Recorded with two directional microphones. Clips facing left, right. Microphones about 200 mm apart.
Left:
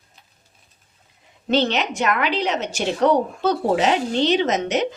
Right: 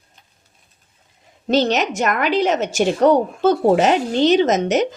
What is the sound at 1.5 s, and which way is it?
A woman's voice, 40° right (ahead or behind).